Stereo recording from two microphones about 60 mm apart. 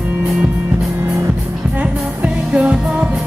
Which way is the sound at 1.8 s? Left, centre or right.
Right.